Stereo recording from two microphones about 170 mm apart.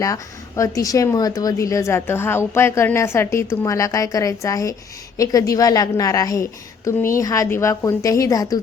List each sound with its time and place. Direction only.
0.0 s a woman's voice: 20° left (ahead or behind)